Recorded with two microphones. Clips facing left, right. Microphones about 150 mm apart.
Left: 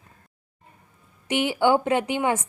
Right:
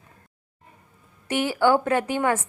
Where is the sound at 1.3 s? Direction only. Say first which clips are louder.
Even; 20° left (ahead or behind).